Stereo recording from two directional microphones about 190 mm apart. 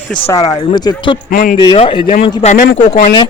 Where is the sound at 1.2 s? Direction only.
45° left (ahead or behind).